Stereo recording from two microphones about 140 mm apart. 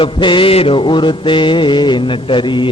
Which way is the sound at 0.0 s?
35° left (ahead or behind).